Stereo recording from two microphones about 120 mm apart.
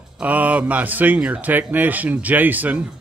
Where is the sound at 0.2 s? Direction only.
10° right (ahead or behind).